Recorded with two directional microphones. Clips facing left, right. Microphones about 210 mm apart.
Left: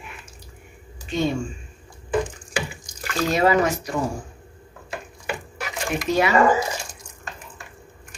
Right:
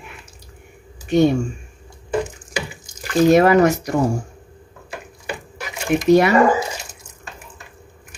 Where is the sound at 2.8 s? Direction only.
20° right (ahead or behind).